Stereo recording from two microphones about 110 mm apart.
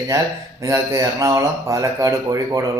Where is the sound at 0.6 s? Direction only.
30° right (ahead or behind).